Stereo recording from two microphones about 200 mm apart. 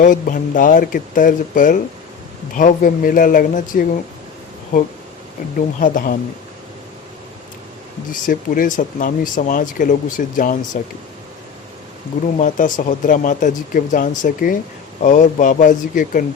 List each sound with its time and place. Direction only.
0.0 s speech: 40° left (ahead or behind)
5.8 s speech: 45° left (ahead or behind)
8.1 s speech: 45° left (ahead or behind)
12.4 s speech: 40° left (ahead or behind)